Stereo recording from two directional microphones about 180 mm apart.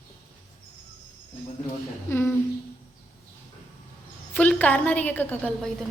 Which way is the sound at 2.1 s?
15° left (ahead or behind).